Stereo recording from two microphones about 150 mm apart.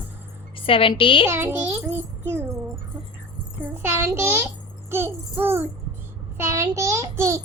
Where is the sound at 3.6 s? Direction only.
15° right (ahead or behind).